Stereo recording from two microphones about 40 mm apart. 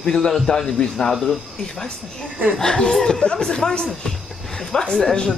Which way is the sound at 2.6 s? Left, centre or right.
Centre.